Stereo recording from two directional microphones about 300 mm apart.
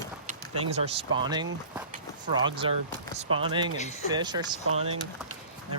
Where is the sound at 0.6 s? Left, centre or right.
Centre.